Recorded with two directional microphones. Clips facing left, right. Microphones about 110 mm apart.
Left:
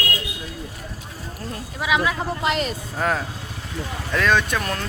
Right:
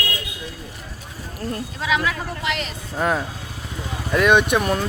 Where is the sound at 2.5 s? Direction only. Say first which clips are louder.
Left 4 dB; 40° left (ahead or behind).